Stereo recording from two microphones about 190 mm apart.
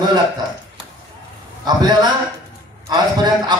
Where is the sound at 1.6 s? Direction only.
20° right (ahead or behind).